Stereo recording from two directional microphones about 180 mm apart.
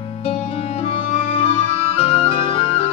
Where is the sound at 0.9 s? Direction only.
35° left (ahead or behind).